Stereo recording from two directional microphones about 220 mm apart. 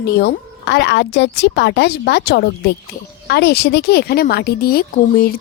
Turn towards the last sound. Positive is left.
turn(degrees=45)  # may be behind; listen again after turning